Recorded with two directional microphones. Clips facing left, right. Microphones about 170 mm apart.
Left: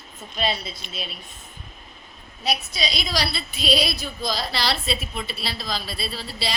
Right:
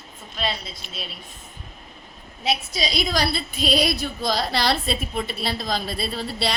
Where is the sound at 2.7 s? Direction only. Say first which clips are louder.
Right 3 dB; 45° right (ahead or behind).